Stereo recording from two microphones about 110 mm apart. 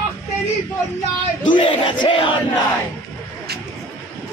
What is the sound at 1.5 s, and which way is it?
Battle cry, 50° left (ahead or behind).